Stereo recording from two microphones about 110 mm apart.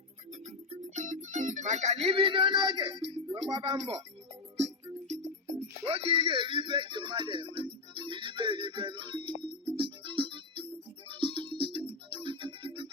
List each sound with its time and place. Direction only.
0.3 s music: 85° right; by 3.9 s 55° right (ahead or behind)
5.5 s music: 60° right (ahead or behind)